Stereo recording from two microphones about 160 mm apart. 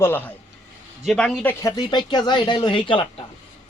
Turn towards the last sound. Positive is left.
turn(degrees=30)  # may be behind; listen again after turning